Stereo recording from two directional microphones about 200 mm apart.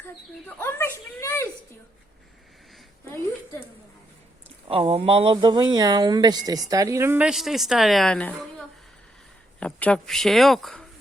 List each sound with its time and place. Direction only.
0.0 s bird: 10° left (ahead or behind)
4.7 s speech: 30° right (ahead or behind); by 10.8 s centre (ahead or behind)